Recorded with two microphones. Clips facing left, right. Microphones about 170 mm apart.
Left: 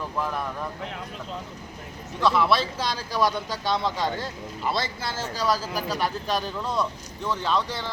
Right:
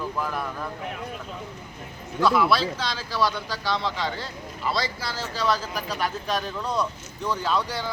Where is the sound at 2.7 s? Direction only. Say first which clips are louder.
Left 1 dB; 15° left (ahead or behind).